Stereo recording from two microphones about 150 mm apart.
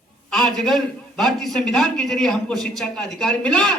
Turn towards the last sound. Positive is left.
turn(degrees=5)  # may be behind; listen again after turning